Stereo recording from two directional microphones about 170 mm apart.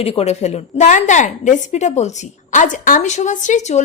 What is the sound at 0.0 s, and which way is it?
A woman's voice, 35° left (ahead or behind).